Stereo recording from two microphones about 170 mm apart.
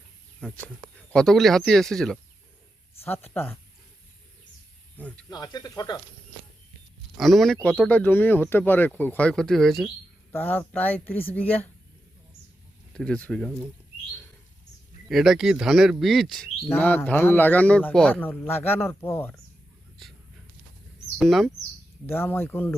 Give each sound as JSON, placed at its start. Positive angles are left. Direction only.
{"t": 0.3, "sound": "a man's voice", "side_deg": 5}
{"t": 4.9, "sound": "speech", "side_deg": 10}
{"t": 5.3, "sound": "speech", "side_deg": 25}
{"t": 7.2, "sound": "a man's voice", "side_deg": 0}
{"t": 10.3, "sound": "a man's voice", "side_deg": 10}
{"t": 12.9, "sound": "speech", "side_deg": 5}
{"t": 15.1, "sound": "a man's voice", "side_deg": 0}
{"t": 21.2, "sound": "speech", "side_deg": 0}
{"t": 22.0, "sound": "a man's voice", "side_deg": 15}